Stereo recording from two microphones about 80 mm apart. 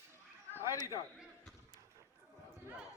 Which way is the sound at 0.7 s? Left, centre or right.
Left.